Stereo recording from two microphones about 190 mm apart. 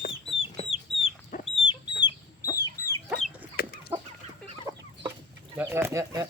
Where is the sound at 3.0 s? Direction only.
Centre (ahead or behind).